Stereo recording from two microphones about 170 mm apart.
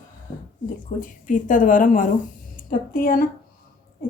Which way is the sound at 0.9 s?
50° left (ahead or behind).